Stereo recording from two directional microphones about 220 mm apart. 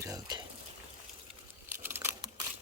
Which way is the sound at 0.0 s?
15° right (ahead or behind).